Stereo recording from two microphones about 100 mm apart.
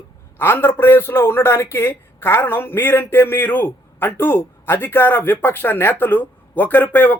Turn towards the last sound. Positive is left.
turn(degrees=20)  # may be behind; listen again after turning